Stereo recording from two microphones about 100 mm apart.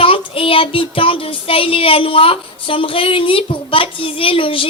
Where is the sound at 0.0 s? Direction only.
65° left (ahead or behind).